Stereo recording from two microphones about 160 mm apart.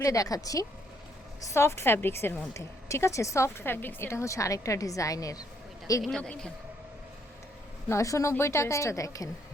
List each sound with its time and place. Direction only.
0.0 s a woman's voice: 20° left (ahead or behind)
6.0 s a man's voice: 5° left (ahead or behind)
7.9 s a woman's voice: 20° left (ahead or behind)